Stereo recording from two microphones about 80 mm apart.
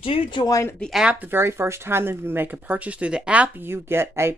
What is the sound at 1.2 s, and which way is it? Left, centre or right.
Speech, right.